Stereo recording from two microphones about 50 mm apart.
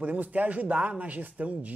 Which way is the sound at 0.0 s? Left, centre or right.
Right.